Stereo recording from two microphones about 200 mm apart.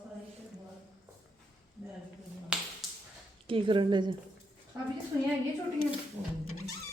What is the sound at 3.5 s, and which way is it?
Speech, 25° right (ahead or behind).